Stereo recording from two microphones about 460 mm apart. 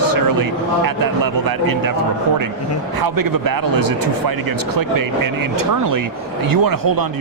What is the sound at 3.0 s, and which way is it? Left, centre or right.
Speech, right.